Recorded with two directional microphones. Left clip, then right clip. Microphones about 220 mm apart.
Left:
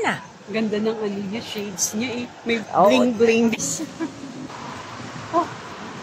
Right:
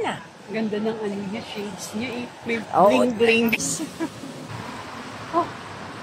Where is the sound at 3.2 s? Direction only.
45° left (ahead or behind).